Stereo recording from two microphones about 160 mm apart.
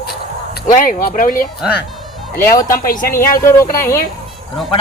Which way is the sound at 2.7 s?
60° left (ahead or behind).